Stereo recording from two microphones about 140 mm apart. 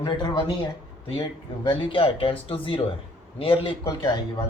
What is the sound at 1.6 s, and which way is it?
Speech, 40° left (ahead or behind).